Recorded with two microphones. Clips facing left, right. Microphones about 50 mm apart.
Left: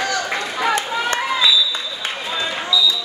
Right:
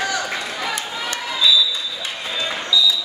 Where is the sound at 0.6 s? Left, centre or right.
Left.